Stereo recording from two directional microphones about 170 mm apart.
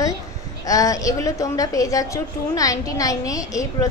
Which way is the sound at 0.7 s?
20° left (ahead or behind).